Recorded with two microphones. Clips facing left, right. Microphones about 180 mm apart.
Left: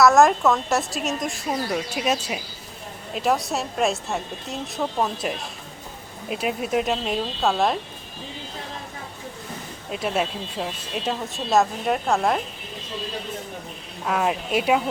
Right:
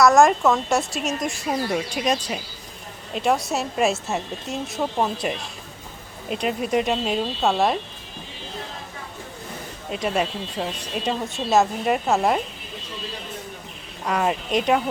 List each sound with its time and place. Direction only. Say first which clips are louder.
0.0 s speech: even; centre (ahead or behind)
9.9 s speech: right 1 dB; centre (ahead or behind)
14.0 s speech: even; centre (ahead or behind)